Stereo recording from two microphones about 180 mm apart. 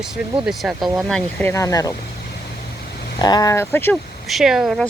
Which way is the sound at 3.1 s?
20° left (ahead or behind).